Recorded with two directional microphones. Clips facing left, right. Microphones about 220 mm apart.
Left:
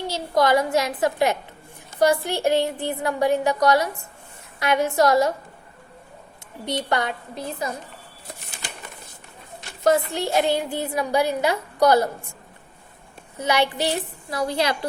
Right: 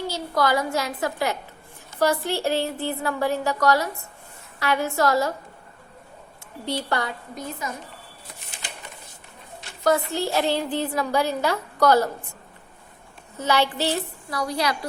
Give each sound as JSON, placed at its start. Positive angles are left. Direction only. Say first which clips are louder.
{"t": 0.1, "sound": "a woman's voice", "louder": "left 5 dB", "side_deg": 20}
{"t": 6.7, "sound": "a woman's voice", "louder": "left 2 dB", "side_deg": 20}
{"t": 9.8, "sound": "a woman's voice", "louder": "left 2 dB", "side_deg": 20}
{"t": 13.4, "sound": "a woman's voice", "louder": "left 1 dB", "side_deg": 15}